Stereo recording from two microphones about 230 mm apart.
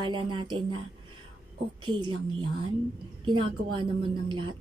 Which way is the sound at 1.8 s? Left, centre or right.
Centre.